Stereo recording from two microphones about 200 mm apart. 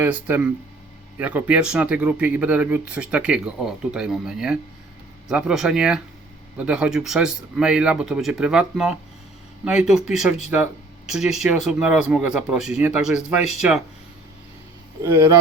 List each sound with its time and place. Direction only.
0.0 s speech: 10° right (ahead or behind)
15.0 s speech: 15° right (ahead or behind)